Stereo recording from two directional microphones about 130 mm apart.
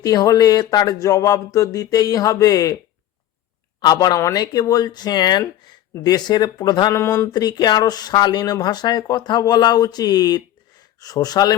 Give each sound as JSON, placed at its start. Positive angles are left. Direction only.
{"t": 0.0, "sound": "speech", "side_deg": 30}
{"t": 3.8, "sound": "speech", "side_deg": 30}
{"t": 6.9, "sound": "speech", "side_deg": 20}
{"t": 7.3, "sound": "speech", "side_deg": 35}